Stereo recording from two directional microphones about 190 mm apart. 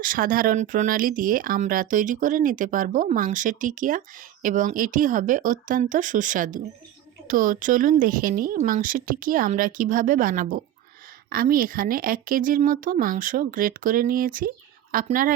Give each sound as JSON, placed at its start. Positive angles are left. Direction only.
{"t": 0.0, "sound": "speech", "side_deg": -45}